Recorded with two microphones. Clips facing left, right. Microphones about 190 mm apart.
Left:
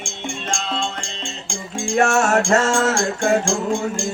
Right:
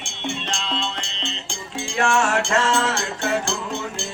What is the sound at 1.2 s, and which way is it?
Music, 10° left (ahead or behind).